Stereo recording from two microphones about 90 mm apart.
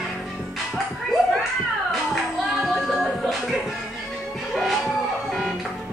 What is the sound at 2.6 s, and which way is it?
Music, centre (ahead or behind).